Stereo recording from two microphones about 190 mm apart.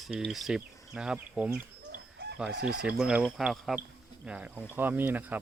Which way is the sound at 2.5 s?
60° right (ahead or behind).